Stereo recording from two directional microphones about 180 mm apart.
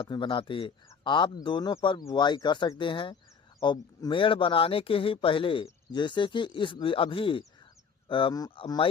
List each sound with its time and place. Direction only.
0.0 s speech: 25° left (ahead or behind)
0.9 s a sound: 25° left (ahead or behind)
1.5 s speech: 25° left (ahead or behind)